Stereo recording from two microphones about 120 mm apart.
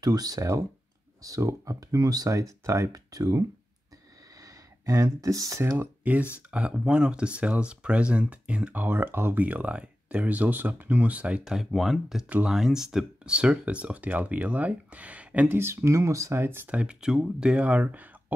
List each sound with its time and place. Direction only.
0.0 s speech: 35° right (ahead or behind); by 18.1 s 15° right (ahead or behind)